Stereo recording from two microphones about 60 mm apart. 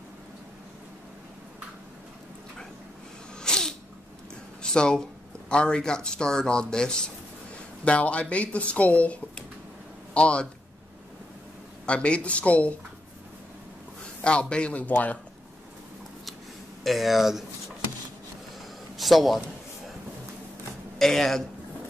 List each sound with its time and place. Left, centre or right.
3.3 s sneeze: centre
4.6 s speech: centre
11.8 s speech: centre
14.2 s speech: centre
16.8 s speech: centre
18.9 s a man's voice: centre
21.0 s speech: centre